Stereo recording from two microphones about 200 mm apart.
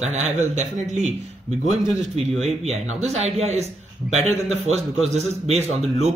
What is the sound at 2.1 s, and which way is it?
A man's voice, 30° right (ahead or behind).